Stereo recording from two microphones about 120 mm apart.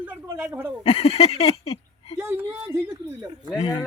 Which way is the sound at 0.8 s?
55° left (ahead or behind).